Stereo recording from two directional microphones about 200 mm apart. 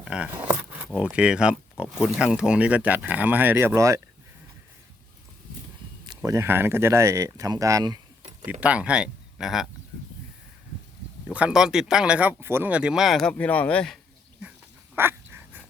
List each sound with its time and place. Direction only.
0.0 s speech: 5° right (ahead or behind)
6.1 s speech: 15° right (ahead or behind)
8.6 s speech: 5° right (ahead or behind)
11.3 s speech: 5° right (ahead or behind)
14.9 s dog: 10° right (ahead or behind)